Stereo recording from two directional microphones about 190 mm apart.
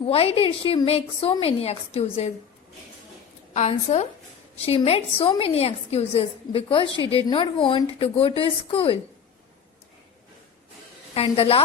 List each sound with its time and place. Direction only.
0.0 s a woman's voice: 30° left (ahead or behind)
3.5 s a woman's voice: 35° left (ahead or behind)
11.1 s a woman's voice: 30° left (ahead or behind)